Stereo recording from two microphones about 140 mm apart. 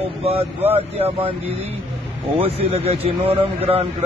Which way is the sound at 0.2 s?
45° right (ahead or behind).